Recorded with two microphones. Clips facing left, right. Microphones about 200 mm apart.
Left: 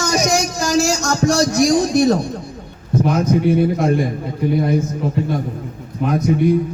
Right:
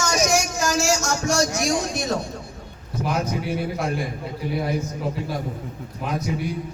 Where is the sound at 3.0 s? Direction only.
Centre (ahead or behind).